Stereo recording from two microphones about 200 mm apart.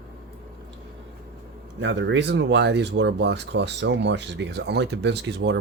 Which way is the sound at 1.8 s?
65° right (ahead or behind).